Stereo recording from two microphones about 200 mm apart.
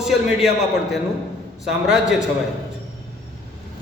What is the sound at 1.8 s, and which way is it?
Speech, 5° right (ahead or behind).